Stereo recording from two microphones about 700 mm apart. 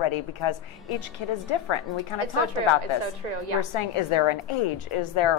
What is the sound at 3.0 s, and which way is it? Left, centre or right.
Speech, right.